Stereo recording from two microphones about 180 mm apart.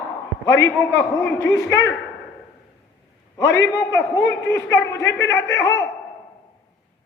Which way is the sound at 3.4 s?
85° left.